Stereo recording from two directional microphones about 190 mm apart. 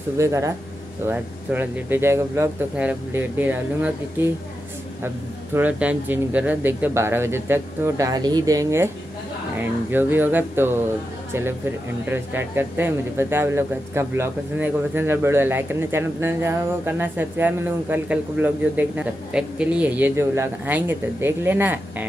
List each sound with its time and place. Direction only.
0.2 s speech: 15° right (ahead or behind)
12.1 s speech: 10° right (ahead or behind)